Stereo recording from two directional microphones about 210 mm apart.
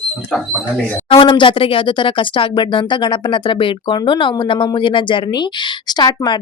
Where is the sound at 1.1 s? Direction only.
25° left (ahead or behind).